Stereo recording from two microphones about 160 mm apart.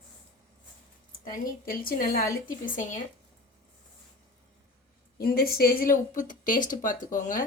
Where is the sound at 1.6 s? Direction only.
65° left (ahead or behind).